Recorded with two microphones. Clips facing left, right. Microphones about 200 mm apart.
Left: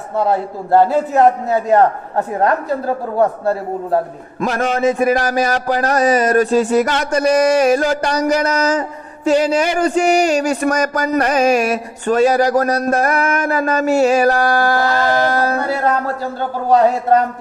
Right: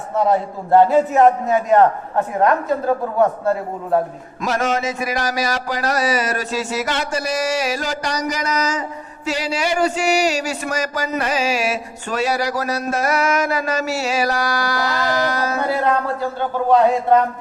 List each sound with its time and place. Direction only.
0.7 s a man's voice: 35° left (ahead or behind)
4.6 s a man's voice: 55° left (ahead or behind)